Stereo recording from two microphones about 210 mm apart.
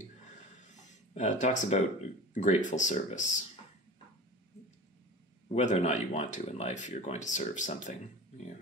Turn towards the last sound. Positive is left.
turn(degrees=35)  # may be behind; listen again after turning